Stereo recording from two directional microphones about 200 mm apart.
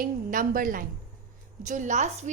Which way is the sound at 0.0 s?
45° right (ahead or behind).